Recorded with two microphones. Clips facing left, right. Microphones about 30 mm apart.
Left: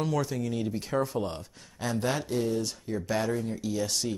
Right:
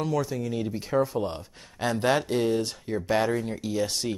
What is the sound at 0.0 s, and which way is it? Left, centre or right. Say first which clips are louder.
Speech: right 2 dB; centre.